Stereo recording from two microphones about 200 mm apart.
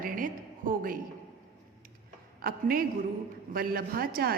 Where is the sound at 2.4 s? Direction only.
50° right (ahead or behind).